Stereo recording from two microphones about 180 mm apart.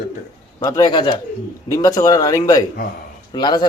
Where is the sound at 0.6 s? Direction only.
25° left (ahead or behind).